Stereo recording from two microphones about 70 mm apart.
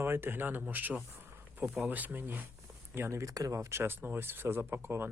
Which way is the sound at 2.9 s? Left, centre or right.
Right.